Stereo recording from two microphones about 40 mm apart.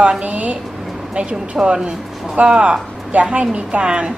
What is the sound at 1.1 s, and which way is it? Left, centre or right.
A woman's voice, right.